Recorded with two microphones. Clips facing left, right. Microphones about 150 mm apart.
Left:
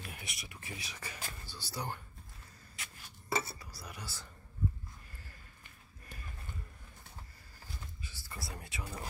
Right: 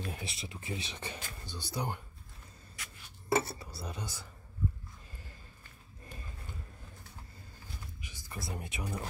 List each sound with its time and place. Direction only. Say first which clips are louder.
0.0 s speech: right 7 dB; 30° right (ahead or behind)
3.3 s speech: right 6 dB; 25° right (ahead or behind)
8.0 s speech: right 5 dB; 15° right (ahead or behind)